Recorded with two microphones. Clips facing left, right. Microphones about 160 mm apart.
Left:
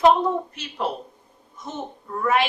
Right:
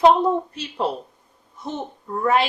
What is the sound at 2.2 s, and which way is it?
Speech, 35° right (ahead or behind).